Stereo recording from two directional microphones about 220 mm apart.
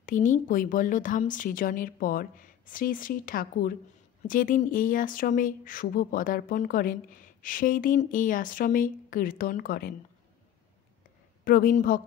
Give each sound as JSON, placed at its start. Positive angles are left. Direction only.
{"t": 0.0, "sound": "speech", "side_deg": 35}
{"t": 11.4, "sound": "speech", "side_deg": 40}